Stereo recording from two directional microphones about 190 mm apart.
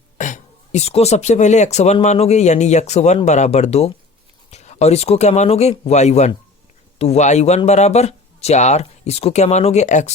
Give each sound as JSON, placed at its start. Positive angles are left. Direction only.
{"t": 0.2, "sound": "speech", "side_deg": 40}